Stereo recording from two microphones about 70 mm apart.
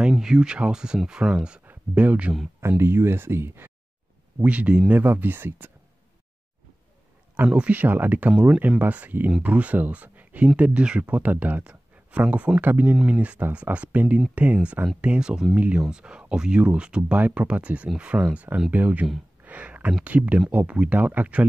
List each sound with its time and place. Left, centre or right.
0.1 s speech: centre
2.8 s speech: right
4.5 s speech: centre
5.0 s speech: right
7.5 s speech: right
8.3 s speech: centre
8.5 s speech: right
19.4 s a sound: right
20.0 s speech: centre